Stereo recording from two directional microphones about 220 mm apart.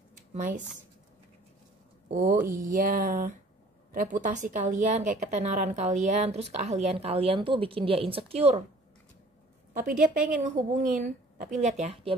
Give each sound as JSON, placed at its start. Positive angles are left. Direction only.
{"t": 0.3, "sound": "speech", "side_deg": -35}
{"t": 2.0, "sound": "speech", "side_deg": -35}
{"t": 2.4, "sound": "speech", "side_deg": -15}
{"t": 2.7, "sound": "a woman's voice", "side_deg": -40}
{"t": 9.8, "sound": "a woman's voice", "side_deg": -40}